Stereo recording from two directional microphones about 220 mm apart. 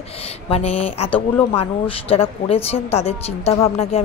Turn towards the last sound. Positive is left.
turn(degrees=25)  # may be behind; listen again after turning